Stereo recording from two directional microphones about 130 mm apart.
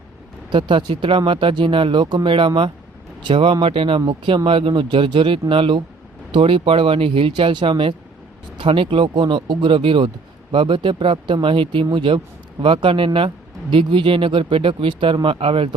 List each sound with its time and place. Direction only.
0.5 s speech: 35° right (ahead or behind)